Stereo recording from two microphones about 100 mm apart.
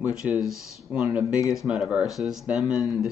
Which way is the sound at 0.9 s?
15° right (ahead or behind).